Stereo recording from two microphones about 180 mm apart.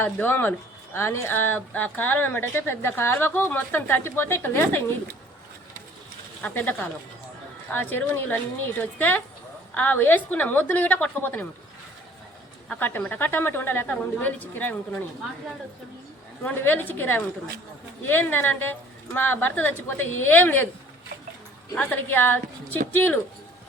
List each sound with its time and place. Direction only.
0.0 s speech: 10° left (ahead or behind)
6.4 s speech: 10° left (ahead or behind)
12.6 s speech: 10° left (ahead or behind)
16.4 s speech: 10° left (ahead or behind)
21.7 s speech: 10° left (ahead or behind)